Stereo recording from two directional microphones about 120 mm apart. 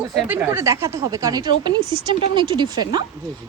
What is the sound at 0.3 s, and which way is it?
A woman's voice, 20° right (ahead or behind).